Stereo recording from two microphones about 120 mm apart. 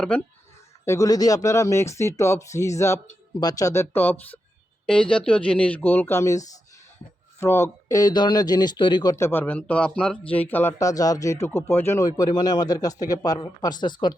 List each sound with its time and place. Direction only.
0.0 s speech: 10° left (ahead or behind)
0.9 s speech: 30° left (ahead or behind)
9.1 s speech: 20° left (ahead or behind); by 14.2 s 40° left (ahead or behind)